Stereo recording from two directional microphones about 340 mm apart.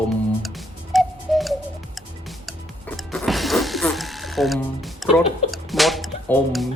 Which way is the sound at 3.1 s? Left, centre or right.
Centre.